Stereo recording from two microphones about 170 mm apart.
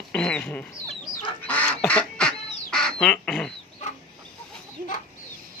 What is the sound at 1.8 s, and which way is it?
Duck, 5° left (ahead or behind).